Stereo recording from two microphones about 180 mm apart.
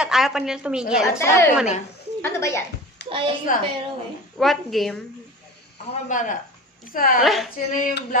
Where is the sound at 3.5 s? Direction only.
45° left (ahead or behind).